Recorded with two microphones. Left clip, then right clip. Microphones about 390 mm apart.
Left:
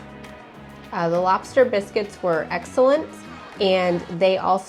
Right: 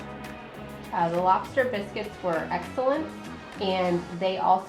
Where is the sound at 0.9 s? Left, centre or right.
Left.